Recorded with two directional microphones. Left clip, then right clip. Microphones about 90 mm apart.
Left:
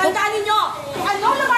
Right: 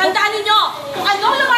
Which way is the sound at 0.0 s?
30° left (ahead or behind).